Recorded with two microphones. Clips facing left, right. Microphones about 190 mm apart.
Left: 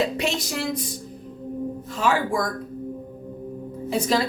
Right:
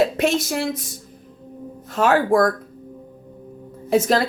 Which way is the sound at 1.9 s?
60° right (ahead or behind).